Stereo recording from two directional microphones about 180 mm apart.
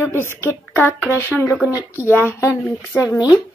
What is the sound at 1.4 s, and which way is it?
Speech, 5° right (ahead or behind).